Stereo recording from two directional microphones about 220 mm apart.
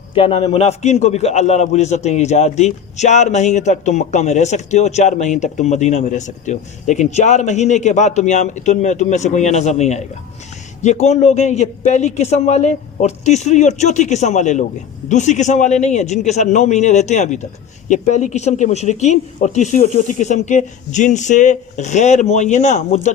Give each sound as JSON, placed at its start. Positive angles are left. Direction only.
{"t": 0.1, "sound": "a man's voice", "side_deg": 25}